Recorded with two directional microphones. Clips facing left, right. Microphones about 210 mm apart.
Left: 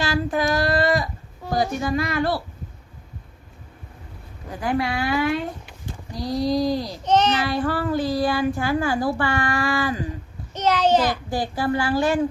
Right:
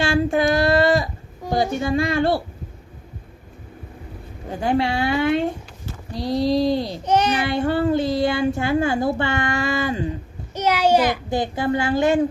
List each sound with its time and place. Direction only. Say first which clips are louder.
0.0 s a sound: right 4 dB; 30° right (ahead or behind)
4.4 s speech: right 3 dB; 25° right (ahead or behind)
6.2 s speech: right 3 dB; centre (ahead or behind)
6.5 s speech: right 2 dB; 25° right (ahead or behind)
7.0 s a child's voice: left 2 dB; 10° right (ahead or behind)
7.4 s speech: right 4 dB; 25° right (ahead or behind)
10.5 s a child's voice: right 1 dB; 10° right (ahead or behind)
11.1 s speech: right 3 dB; 20° right (ahead or behind)